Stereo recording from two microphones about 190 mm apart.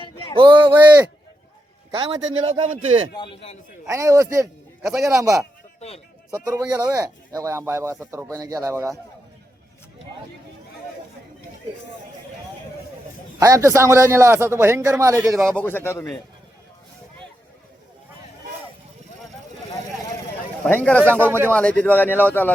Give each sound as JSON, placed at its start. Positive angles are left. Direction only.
{"t": 0.0, "sound": "a sound", "side_deg": 25}
{"t": 0.3, "sound": "a man's voice", "side_deg": -25}
{"t": 0.7, "sound": "a man's voice", "side_deg": -10}
{"t": 1.9, "sound": "a man's voice", "side_deg": -25}
{"t": 3.2, "sound": "a man's voice", "side_deg": 30}
{"t": 3.8, "sound": "a man's voice", "side_deg": -15}
{"t": 4.9, "sound": "a man's voice", "side_deg": 0}
{"t": 5.2, "sound": "a man's voice", "side_deg": -15}
{"t": 6.5, "sound": "a man's voice", "side_deg": -20}
{"t": 13.4, "sound": "a man's voice", "side_deg": -15}
{"t": 15.4, "sound": "speech", "side_deg": 5}
{"t": 20.7, "sound": "speech", "side_deg": 10}
{"t": 21.0, "sound": "a man's voice", "side_deg": -10}
{"t": 21.5, "sound": "speech", "side_deg": 5}